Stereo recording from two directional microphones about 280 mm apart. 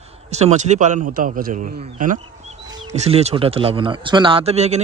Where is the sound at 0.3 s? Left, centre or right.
Right.